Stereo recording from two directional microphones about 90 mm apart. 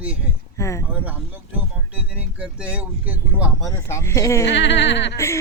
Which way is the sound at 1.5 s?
15° right (ahead or behind).